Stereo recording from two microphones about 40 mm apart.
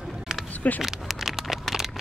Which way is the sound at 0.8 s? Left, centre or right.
Centre.